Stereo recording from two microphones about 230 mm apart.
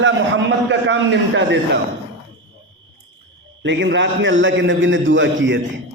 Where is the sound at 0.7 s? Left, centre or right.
Right.